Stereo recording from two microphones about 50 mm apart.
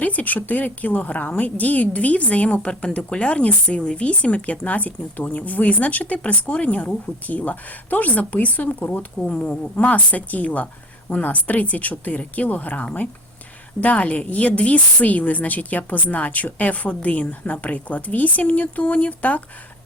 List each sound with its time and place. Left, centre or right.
0.0 s speech: left
9.2 s a woman's voice: left